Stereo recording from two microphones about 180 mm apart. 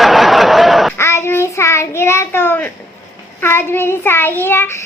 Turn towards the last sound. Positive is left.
turn(degrees=10)  # may be behind; listen again after turning